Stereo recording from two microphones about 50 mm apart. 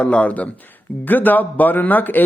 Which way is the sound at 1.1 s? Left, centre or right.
Left.